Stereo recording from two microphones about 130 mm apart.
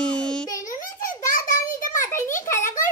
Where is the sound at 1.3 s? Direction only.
90° left.